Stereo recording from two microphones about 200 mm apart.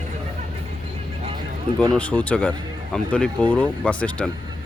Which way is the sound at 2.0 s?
5° left (ahead or behind).